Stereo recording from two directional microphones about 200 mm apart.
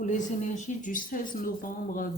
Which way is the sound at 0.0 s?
40° left (ahead or behind).